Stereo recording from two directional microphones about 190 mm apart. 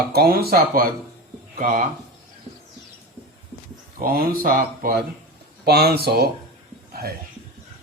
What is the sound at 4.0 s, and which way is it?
Speech, 50° right (ahead or behind).